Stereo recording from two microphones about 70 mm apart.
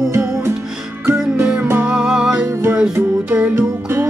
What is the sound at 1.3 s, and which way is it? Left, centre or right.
Music, right.